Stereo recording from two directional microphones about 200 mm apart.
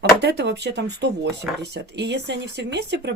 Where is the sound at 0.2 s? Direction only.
55° right (ahead or behind).